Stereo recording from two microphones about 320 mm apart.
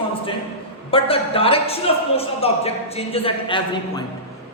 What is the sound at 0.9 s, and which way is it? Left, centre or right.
A woman's voice, centre.